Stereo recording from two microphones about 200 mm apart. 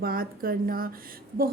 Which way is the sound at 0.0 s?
45° right (ahead or behind).